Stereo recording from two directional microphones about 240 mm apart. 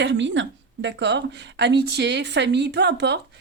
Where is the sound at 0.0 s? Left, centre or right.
Right.